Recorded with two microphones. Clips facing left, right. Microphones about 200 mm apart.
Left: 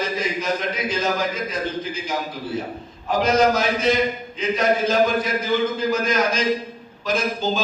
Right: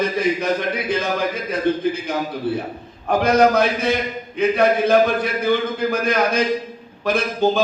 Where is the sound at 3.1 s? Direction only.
60° right (ahead or behind).